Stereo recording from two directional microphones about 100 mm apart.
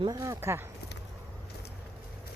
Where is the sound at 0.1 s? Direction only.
30° right (ahead or behind).